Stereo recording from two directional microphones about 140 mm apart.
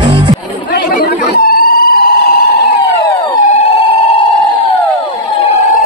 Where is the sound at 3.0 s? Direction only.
25° left (ahead or behind).